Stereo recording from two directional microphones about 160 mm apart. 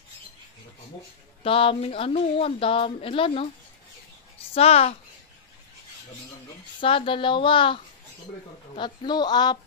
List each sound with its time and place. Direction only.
1.4 s a woman's voice: 35° left (ahead or behind)
4.6 s a woman's voice: 40° left (ahead or behind)
6.8 s a woman's voice: 35° left (ahead or behind)